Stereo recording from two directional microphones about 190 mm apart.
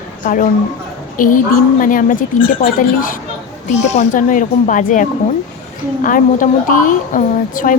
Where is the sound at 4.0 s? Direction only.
45° left (ahead or behind).